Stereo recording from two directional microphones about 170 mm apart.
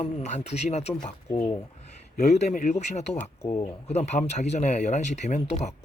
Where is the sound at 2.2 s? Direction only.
40° left (ahead or behind).